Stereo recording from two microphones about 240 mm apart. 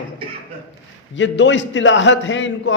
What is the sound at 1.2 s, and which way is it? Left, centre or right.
A man's voice, left.